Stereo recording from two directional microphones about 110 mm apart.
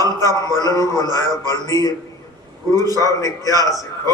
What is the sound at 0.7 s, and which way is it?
Speech, 30° right (ahead or behind).